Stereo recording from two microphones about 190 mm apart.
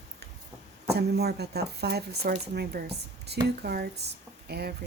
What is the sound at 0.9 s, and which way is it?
Speech, 60° right (ahead or behind).